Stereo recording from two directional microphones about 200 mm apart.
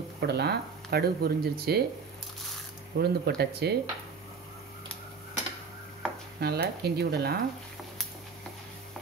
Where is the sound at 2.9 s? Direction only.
55° right (ahead or behind).